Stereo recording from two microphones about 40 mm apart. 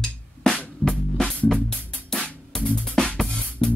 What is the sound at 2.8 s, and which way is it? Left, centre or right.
Music, centre.